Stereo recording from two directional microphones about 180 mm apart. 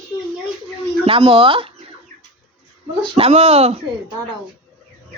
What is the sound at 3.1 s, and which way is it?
Speech, 35° right (ahead or behind).